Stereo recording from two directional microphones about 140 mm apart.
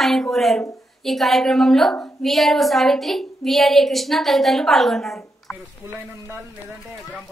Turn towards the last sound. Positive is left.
turn(degrees=-15)  # may be behind; listen again after turning